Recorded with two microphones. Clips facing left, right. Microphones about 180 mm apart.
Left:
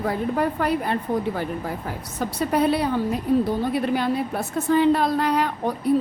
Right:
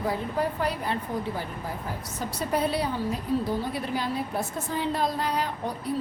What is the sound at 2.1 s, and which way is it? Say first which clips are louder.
A woman's voice: left 6 dB; 60° left (ahead or behind).